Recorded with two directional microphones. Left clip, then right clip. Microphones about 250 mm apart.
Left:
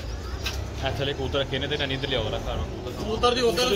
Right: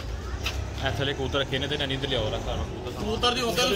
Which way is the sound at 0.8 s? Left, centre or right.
Centre.